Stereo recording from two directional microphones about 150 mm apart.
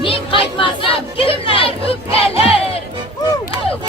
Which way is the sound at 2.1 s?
40° left (ahead or behind).